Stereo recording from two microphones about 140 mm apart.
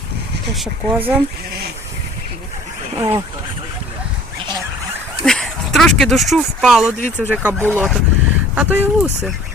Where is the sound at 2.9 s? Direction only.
20° right (ahead or behind).